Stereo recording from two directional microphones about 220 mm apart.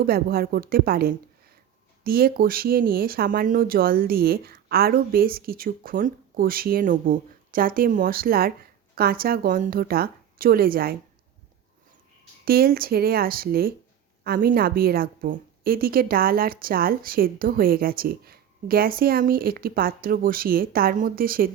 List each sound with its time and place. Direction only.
0.0 s a woman's voice: 45° right (ahead or behind)
12.5 s a woman's voice: 45° right (ahead or behind)